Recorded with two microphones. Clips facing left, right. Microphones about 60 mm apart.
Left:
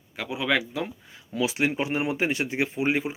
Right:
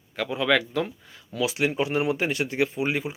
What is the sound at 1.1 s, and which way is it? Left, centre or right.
Speech, left.